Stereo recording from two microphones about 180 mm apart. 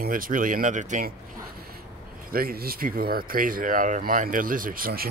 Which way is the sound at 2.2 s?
55° right (ahead or behind).